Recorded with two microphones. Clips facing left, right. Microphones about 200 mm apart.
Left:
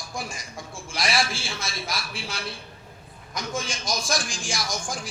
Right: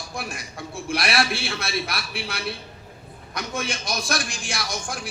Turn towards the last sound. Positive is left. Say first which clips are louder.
# even
turn(degrees=-65)  # may be behind; listen again after turning